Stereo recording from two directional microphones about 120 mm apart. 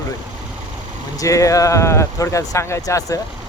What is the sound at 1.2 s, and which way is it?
Speech, 25° left (ahead or behind).